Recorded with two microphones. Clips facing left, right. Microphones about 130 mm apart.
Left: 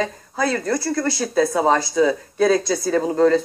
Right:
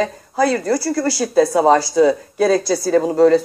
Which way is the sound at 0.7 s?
30° right (ahead or behind).